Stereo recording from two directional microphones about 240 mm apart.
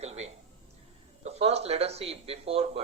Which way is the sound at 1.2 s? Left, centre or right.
Right.